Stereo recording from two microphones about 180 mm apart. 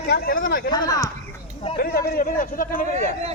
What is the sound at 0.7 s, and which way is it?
Speech, 20° left (ahead or behind).